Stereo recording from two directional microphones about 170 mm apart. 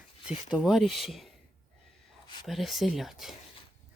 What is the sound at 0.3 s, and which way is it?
Speech, 5° right (ahead or behind).